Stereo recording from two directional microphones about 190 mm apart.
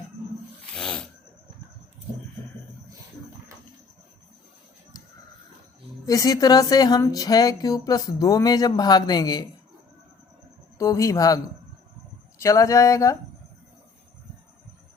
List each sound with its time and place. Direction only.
0.8 s a sound: 5° left (ahead or behind)
6.1 s speech: 20° left (ahead or behind)
10.8 s a man's voice: 15° left (ahead or behind)
12.4 s speech: 15° left (ahead or behind)